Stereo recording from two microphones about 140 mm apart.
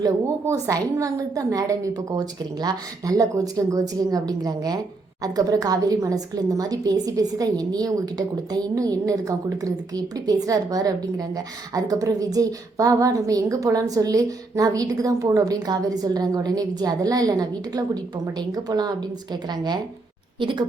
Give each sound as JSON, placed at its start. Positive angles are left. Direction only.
{"t": 0.0, "sound": "a woman's voice", "side_deg": -25}